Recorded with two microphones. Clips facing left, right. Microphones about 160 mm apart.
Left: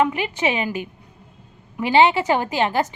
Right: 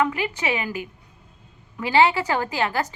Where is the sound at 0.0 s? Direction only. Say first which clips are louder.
Left 3 dB; 20° left (ahead or behind).